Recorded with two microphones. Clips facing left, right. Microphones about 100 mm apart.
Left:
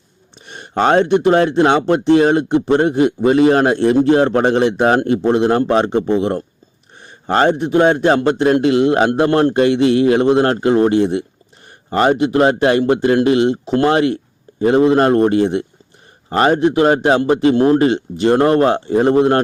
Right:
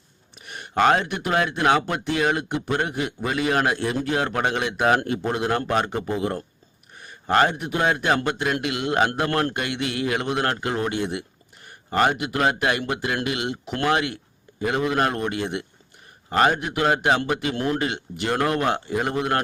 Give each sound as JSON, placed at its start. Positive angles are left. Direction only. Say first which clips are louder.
{"t": 0.3, "sound": "speech", "louder": "left 4 dB", "side_deg": 30}